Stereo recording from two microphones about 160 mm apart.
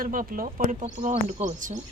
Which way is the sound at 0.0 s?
60° right (ahead or behind).